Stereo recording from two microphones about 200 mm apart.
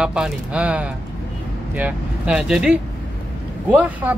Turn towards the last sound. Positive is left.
turn(degrees=-10)  # may be behind; listen again after turning